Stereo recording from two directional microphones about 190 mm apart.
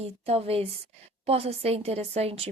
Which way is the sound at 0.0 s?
30° right (ahead or behind).